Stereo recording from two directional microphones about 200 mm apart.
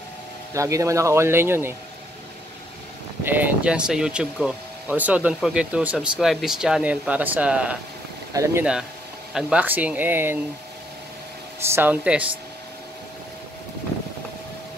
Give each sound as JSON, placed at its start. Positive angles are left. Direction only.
{"t": 0.6, "sound": "speech", "side_deg": -15}
{"t": 3.3, "sound": "speech", "side_deg": -10}
{"t": 8.3, "sound": "speech", "side_deg": -15}
{"t": 9.3, "sound": "speech", "side_deg": -5}
{"t": 11.6, "sound": "speech", "side_deg": -10}